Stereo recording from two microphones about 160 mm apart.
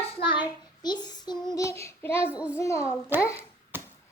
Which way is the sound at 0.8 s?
25° left (ahead or behind).